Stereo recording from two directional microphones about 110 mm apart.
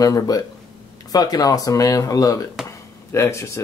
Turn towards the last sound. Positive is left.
turn(degrees=25)  # may be behind; listen again after turning